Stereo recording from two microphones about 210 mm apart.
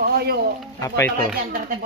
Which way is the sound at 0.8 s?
15° left (ahead or behind).